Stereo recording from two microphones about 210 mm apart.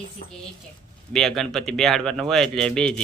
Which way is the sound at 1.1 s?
Centre (ahead or behind).